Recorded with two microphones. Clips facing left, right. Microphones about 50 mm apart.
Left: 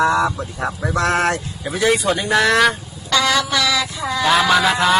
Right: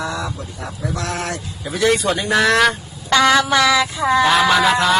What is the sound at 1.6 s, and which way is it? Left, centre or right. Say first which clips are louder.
Speech: right 1 dB; centre.